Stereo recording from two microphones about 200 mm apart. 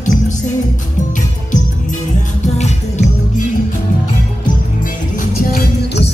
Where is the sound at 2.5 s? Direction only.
35° left (ahead or behind).